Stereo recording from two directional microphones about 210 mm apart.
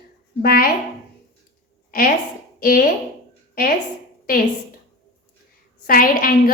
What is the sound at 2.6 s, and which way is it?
Speech, 45° left (ahead or behind).